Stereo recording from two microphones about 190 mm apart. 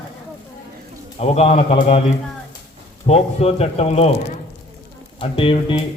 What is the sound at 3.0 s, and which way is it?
Speech, 35° left (ahead or behind).